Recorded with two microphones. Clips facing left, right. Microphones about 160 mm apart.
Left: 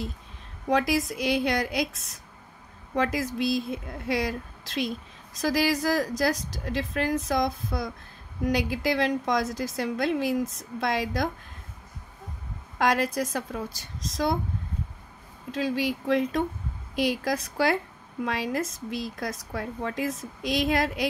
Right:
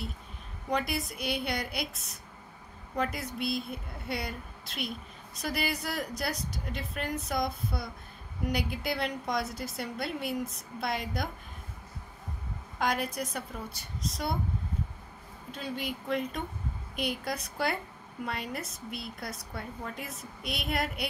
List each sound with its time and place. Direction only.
0.7 s a woman's voice: 90° left
12.7 s a woman's voice: 90° left
15.5 s a woman's voice: 90° left